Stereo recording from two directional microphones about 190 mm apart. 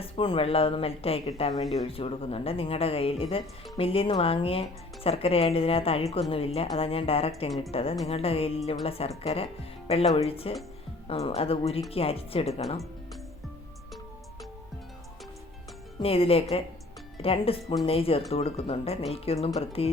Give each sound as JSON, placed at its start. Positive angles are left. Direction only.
{"t": 0.0, "sound": "speech", "side_deg": 30}
{"t": 16.0, "sound": "speech", "side_deg": 30}